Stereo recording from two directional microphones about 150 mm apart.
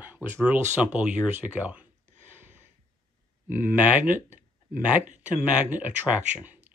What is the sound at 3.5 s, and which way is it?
Speech, 10° right (ahead or behind).